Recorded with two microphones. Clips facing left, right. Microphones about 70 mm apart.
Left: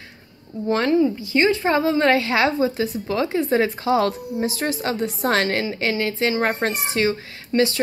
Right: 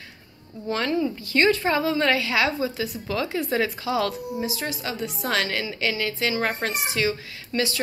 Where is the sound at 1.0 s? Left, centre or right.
Centre.